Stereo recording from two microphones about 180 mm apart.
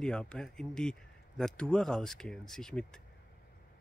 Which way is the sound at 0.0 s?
5° left (ahead or behind).